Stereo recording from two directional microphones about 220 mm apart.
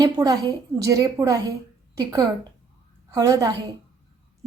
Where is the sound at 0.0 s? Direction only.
15° right (ahead or behind).